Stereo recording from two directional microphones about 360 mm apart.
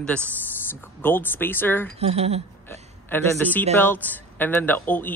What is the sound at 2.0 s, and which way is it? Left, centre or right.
Speech, centre.